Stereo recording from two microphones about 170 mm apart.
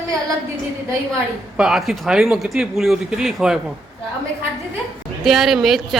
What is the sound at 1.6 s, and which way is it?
A man's voice, 5° right (ahead or behind).